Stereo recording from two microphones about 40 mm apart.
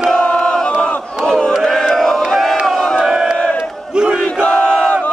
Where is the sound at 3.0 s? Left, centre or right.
Centre.